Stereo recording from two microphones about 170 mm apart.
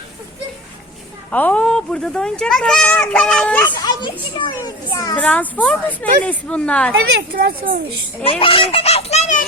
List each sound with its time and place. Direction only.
1.3 s speech: 10° left (ahead or behind)
3.8 s a child's voice: 30° left (ahead or behind)
5.1 s a woman's voice: 10° left (ahead or behind)
7.3 s speech: 55° right (ahead or behind)
8.2 s speech: 35° left (ahead or behind)